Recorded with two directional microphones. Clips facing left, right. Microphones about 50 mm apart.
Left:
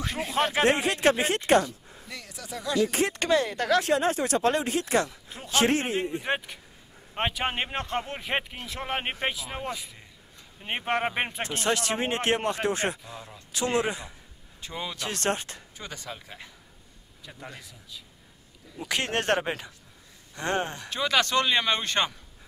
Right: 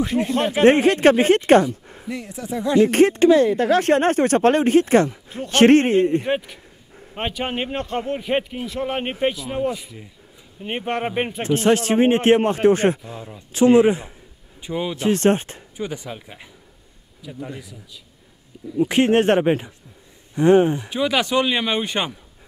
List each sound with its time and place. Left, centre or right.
0.0 s speech: centre
0.7 s a man's voice: right
2.0 s speech: right
3.8 s a man's voice: right
5.5 s a man's voice: right
6.2 s speech: centre
11.4 s a man's voice: right
13.0 s speech: centre
15.8 s speech: centre
17.2 s a man's voice: centre
18.8 s speech: right